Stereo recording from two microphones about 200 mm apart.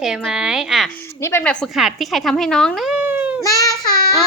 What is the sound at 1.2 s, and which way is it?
A woman's voice, 10° left (ahead or behind).